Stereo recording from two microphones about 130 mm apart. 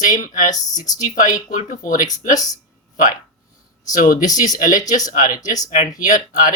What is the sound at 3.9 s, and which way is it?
Speech, 85° left.